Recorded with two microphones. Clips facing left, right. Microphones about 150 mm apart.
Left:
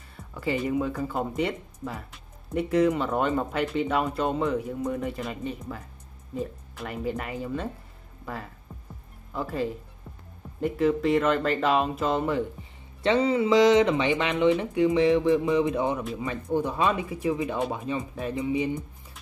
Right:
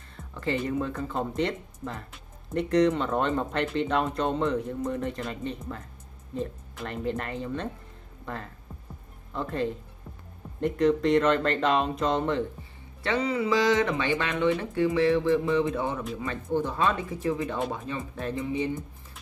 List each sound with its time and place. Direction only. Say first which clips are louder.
0.3 s speech: left 2 dB; 5° left (ahead or behind)
13.0 s speech: left 4 dB; 25° left (ahead or behind)